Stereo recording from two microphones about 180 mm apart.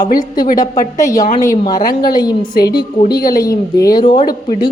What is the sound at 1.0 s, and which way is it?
A woman's voice, 20° left (ahead or behind).